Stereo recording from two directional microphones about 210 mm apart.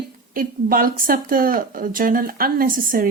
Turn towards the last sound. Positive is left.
turn(degrees=-40)  # may be behind; listen again after turning